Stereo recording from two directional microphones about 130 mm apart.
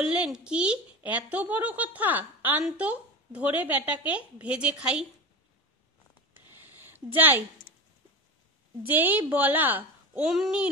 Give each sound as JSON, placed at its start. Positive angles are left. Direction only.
{"t": 0.0, "sound": "a woman's voice", "side_deg": -5}
{"t": 6.3, "sound": "a sound", "side_deg": -15}
{"t": 7.2, "sound": "a woman's voice", "side_deg": -15}
{"t": 8.8, "sound": "a woman's voice", "side_deg": -15}